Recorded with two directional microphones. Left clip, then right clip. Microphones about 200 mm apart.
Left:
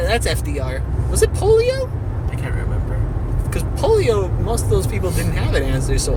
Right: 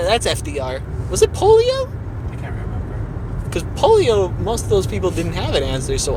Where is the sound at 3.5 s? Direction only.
25° right (ahead or behind).